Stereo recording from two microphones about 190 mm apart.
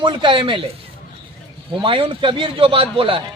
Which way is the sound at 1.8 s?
25° right (ahead or behind).